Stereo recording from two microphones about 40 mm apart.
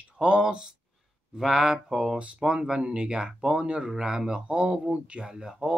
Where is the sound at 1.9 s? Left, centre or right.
Centre; by 5.3 s right.